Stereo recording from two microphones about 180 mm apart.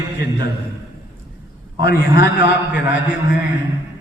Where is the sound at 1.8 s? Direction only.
65° left (ahead or behind).